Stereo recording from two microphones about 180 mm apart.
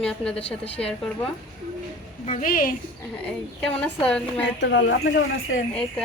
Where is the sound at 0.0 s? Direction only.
5° left (ahead or behind).